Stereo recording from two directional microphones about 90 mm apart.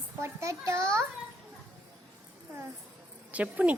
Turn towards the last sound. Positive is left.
turn(degrees=-15)  # may be behind; listen again after turning